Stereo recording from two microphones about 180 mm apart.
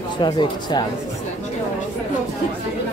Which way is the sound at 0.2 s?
25° left (ahead or behind).